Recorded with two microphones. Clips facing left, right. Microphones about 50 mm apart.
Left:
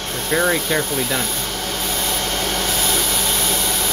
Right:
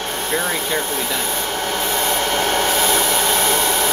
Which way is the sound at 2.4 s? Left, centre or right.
Right.